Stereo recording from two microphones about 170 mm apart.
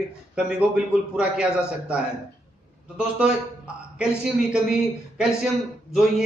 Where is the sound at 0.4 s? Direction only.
5° right (ahead or behind).